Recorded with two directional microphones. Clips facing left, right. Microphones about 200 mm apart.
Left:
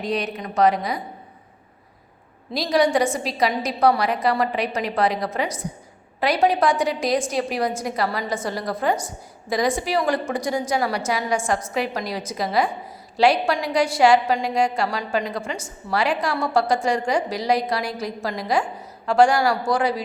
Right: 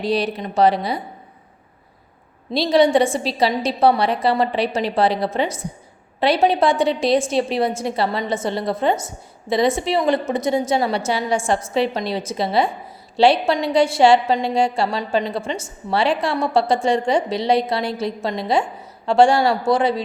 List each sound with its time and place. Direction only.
0.0 s a woman's voice: 30° right (ahead or behind)
2.5 s a woman's voice: 25° right (ahead or behind)